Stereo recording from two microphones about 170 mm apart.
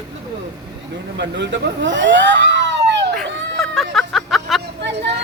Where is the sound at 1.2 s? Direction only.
90° right.